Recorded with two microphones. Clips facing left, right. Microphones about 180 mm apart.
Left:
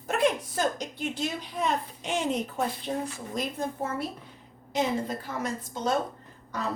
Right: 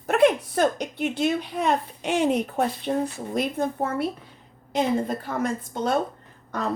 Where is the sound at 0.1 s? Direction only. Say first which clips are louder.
Right 7 dB; 65° right (ahead or behind).